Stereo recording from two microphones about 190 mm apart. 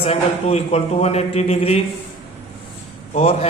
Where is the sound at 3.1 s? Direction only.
30° left (ahead or behind).